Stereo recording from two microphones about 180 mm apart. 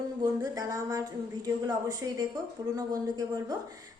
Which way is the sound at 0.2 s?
20° right (ahead or behind).